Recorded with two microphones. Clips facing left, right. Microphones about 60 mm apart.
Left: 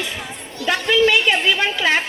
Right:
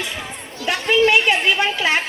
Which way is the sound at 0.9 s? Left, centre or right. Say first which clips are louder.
Right 1 dB; right.